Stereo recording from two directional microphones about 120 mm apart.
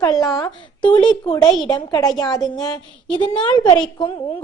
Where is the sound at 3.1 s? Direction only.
40° left (ahead or behind).